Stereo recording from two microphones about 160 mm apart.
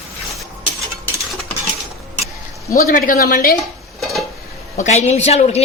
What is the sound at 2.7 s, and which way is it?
Speech, 60° left (ahead or behind).